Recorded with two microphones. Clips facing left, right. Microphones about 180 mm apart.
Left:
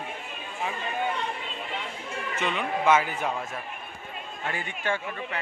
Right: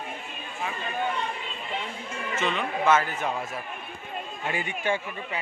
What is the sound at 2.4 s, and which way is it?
Speech, 15° left (ahead or behind).